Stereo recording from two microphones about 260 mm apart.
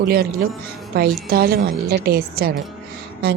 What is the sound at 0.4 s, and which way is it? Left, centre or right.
Speech, right.